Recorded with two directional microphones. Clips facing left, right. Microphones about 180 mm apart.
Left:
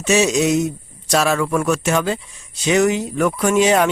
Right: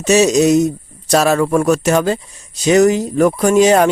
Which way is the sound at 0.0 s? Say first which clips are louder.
Right 5 dB; 40° right (ahead or behind).